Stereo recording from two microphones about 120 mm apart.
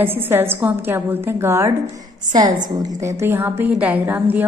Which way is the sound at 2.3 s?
35° right (ahead or behind).